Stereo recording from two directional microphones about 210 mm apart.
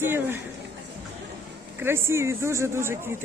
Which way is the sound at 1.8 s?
10° right (ahead or behind).